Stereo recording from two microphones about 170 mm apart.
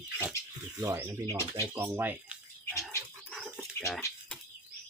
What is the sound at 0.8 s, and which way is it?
Speech, 20° right (ahead or behind).